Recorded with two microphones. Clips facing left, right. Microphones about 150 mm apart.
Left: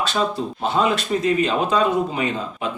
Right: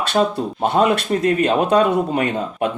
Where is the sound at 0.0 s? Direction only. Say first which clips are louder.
Right 4 dB; 60° right (ahead or behind).